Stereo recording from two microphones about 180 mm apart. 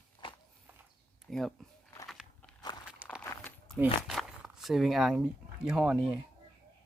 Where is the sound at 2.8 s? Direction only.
5° right (ahead or behind).